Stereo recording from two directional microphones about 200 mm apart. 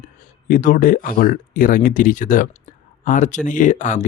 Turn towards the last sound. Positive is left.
turn(degrees=40)  # may be behind; listen again after turning